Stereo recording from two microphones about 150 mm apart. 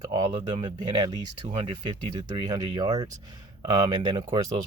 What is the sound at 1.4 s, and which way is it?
Speech, 45° right (ahead or behind).